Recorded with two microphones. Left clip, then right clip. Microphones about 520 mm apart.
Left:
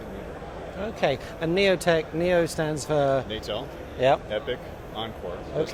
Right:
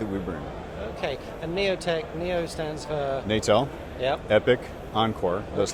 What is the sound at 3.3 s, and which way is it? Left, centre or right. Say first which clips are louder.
Speech: right 9 dB; right.